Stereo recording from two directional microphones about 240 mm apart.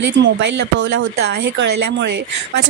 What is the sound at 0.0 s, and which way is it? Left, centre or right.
A woman's voice, right.